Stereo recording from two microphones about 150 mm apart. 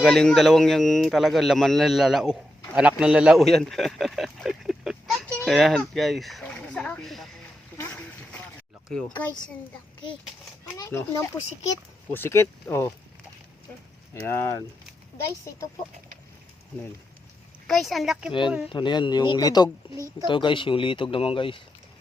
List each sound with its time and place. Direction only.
0.0 s a man's voice: 5° left (ahead or behind)
7.8 s a sound: 10° left (ahead or behind)
8.9 s a man's voice: 5° left (ahead or behind)
10.8 s speech: 20° left (ahead or behind)
14.1 s speech: 15° left (ahead or behind)
17.7 s a man's voice: centre (ahead or behind)
18.3 s speech: 30° left (ahead or behind)